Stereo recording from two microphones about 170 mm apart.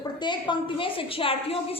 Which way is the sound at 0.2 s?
25° left (ahead or behind).